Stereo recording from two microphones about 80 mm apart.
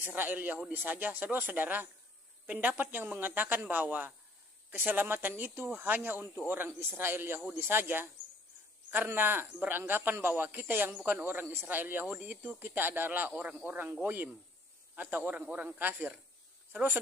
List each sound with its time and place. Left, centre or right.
0.0 s speech: right